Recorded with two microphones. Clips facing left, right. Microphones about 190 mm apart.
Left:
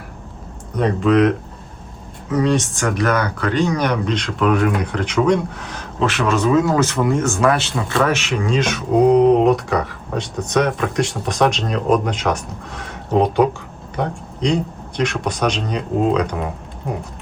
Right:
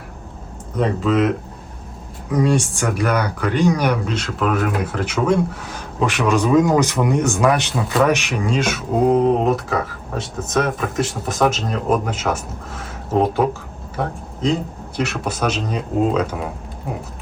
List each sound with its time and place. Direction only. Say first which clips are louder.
0.8 s speech: left 3 dB; centre (ahead or behind)
2.3 s speech: even; 10° right (ahead or behind)
7.8 s speech: right 1 dB; centre (ahead or behind)